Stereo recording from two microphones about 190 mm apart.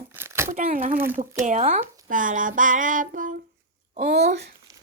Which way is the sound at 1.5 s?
40° right (ahead or behind).